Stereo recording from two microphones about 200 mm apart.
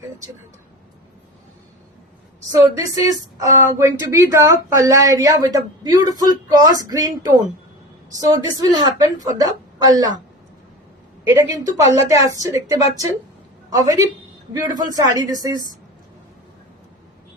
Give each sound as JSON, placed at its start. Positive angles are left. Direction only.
{"t": 2.5, "sound": "a woman's voice", "side_deg": -15}
{"t": 11.3, "sound": "a woman's voice", "side_deg": -15}